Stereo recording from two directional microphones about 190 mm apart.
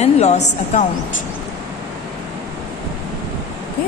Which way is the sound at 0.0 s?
35° left (ahead or behind).